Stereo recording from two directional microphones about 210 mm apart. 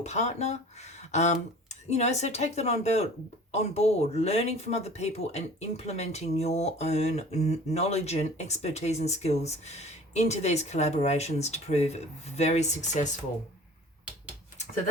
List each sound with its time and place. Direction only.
0.0 s speech: 35° left (ahead or behind)